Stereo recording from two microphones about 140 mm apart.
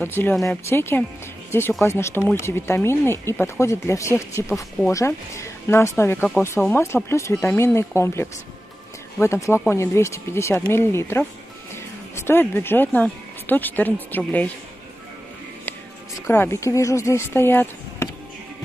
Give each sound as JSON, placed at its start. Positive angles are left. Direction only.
{"t": 0.0, "sound": "speech", "side_deg": 15}
{"t": 16.3, "sound": "speech", "side_deg": 20}